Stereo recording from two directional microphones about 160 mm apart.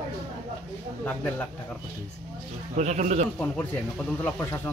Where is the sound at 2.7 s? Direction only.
45° right (ahead or behind).